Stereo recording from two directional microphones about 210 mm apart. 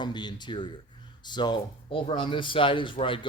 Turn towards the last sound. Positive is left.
turn(degrees=25)  # may be behind; listen again after turning